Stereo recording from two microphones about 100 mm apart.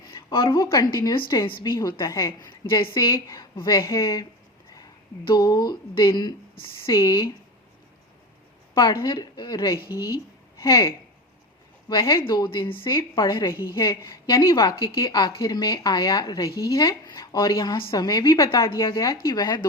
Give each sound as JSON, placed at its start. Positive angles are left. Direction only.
{"t": 0.1, "sound": "a sound", "side_deg": 55}
{"t": 0.6, "sound": "speech", "side_deg": 40}
{"t": 1.1, "sound": "speech", "side_deg": 55}
{"t": 1.9, "sound": "speech", "side_deg": 35}
{"t": 2.2, "sound": "speech", "side_deg": 50}
{"t": 3.1, "sound": "a woman's voice", "side_deg": 35}
{"t": 3.6, "sound": "speech", "side_deg": 50}
{"t": 3.8, "sound": "speech", "side_deg": 35}
{"t": 8.7, "sound": "a woman's voice", "side_deg": 55}
{"t": 11.9, "sound": "speech", "side_deg": 50}
{"t": 12.6, "sound": "a woman's voice", "side_deg": 60}
{"t": 14.0, "sound": "a woman's voice", "side_deg": 25}
{"t": 14.5, "sound": "speech", "side_deg": 50}